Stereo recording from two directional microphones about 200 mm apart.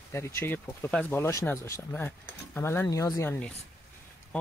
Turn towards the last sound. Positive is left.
turn(degrees=15)  # may be behind; listen again after turning